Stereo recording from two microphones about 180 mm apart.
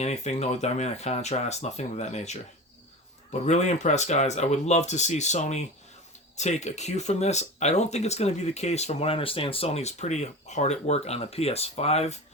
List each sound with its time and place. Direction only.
0.0 s speech: 40° left (ahead or behind)